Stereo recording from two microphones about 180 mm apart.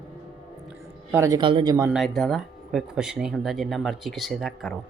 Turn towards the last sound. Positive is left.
turn(degrees=0)  # may be behind; listen again after turning